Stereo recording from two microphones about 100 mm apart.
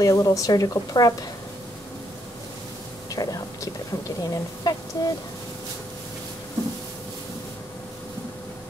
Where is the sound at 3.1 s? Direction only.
35° left (ahead or behind).